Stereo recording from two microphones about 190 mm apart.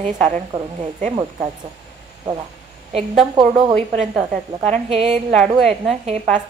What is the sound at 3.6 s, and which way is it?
A woman's voice, 35° right (ahead or behind).